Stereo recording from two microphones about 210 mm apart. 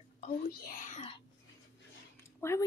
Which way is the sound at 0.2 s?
40° left (ahead or behind).